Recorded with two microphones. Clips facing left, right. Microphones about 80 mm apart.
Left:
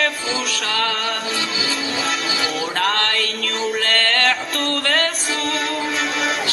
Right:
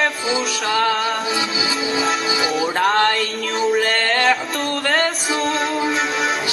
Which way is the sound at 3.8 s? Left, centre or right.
Centre.